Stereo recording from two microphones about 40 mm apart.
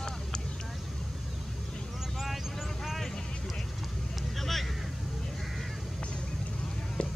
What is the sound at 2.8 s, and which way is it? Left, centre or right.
Vehicle, centre.